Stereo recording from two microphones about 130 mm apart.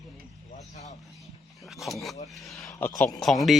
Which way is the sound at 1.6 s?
Centre (ahead or behind).